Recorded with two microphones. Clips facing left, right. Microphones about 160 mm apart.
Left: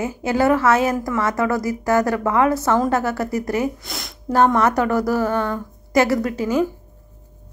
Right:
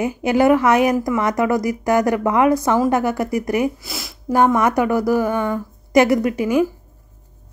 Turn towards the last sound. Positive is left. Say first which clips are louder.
# right 2 dB
turn(degrees=-15)  # may be behind; listen again after turning